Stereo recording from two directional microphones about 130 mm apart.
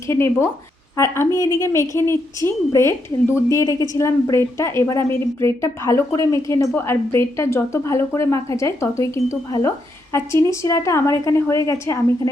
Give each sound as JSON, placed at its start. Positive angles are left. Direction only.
{"t": 0.1, "sound": "a woman's voice", "side_deg": 20}